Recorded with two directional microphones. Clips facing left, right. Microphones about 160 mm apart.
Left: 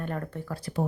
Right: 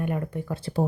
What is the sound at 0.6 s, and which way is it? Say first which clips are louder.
Speech: right 3 dB; 30° right (ahead or behind).